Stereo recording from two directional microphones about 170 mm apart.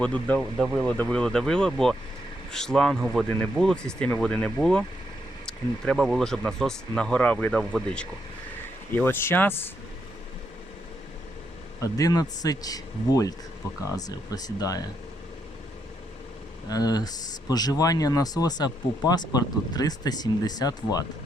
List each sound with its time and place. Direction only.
0.0 s speech: 5° left (ahead or behind)
11.8 s speech: 20° left (ahead or behind)
16.6 s speech: 20° left (ahead or behind)